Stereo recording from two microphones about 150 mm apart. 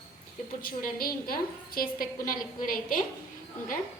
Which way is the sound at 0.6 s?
75° left (ahead or behind).